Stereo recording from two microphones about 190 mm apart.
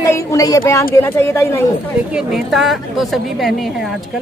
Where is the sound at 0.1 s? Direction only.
15° left (ahead or behind).